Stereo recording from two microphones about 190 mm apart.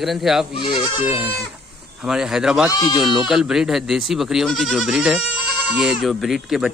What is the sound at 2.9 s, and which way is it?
Speech, centre (ahead or behind).